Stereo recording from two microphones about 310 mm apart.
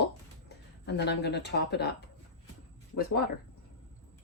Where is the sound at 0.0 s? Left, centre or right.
Left.